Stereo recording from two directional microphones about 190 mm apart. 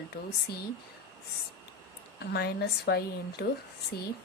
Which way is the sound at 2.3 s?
55° left (ahead or behind).